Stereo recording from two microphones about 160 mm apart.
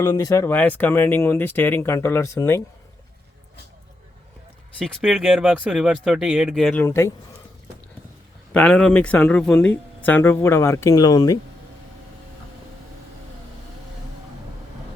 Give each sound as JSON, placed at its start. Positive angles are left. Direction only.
{"t": 0.0, "sound": "speech", "side_deg": 20}
{"t": 4.8, "sound": "speech", "side_deg": -5}
{"t": 6.8, "sound": "speech", "side_deg": 20}
{"t": 8.5, "sound": "speech", "side_deg": 5}